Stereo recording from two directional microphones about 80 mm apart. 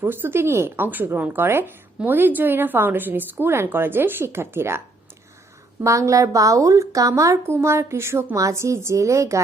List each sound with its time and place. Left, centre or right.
0.0 s a woman's voice: right
5.8 s a woman's voice: right